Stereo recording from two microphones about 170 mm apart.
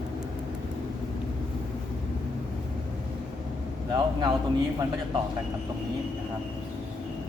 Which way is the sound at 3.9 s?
25° right (ahead or behind).